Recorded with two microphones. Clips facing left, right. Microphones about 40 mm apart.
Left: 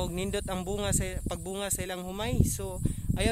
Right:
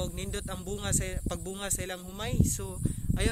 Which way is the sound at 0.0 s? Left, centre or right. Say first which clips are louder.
Left 5 dB; left.